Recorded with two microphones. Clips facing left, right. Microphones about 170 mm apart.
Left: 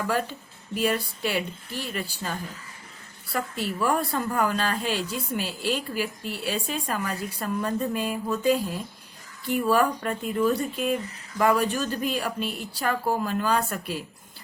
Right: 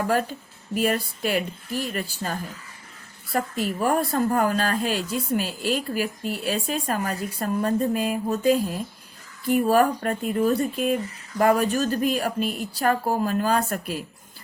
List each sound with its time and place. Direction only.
0.1 s speech: 45° right (ahead or behind)